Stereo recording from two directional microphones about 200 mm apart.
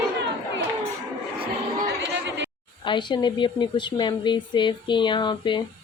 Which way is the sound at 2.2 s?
60° right (ahead or behind).